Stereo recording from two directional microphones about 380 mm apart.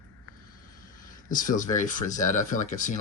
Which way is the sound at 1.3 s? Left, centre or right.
Left.